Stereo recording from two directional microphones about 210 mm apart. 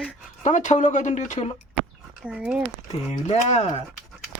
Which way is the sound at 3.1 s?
35° left (ahead or behind).